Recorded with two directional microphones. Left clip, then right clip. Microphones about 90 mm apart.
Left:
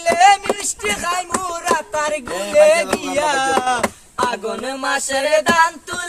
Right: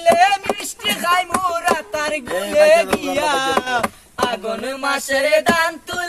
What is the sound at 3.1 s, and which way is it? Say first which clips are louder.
Speech: left 2 dB; 40° left (ahead or behind).